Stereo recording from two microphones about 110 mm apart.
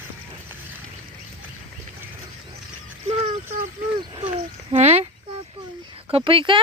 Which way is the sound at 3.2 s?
70° right (ahead or behind).